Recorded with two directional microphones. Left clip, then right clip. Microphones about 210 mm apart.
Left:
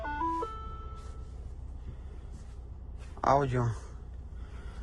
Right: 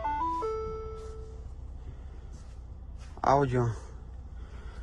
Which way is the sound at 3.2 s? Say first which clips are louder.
Right 2 dB; 30° right (ahead or behind).